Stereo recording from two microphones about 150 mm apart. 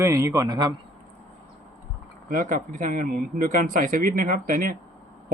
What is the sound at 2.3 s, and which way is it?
Speech, 60° right (ahead or behind).